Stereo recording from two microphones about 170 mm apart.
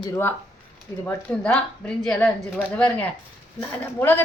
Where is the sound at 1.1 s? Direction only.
5° left (ahead or behind).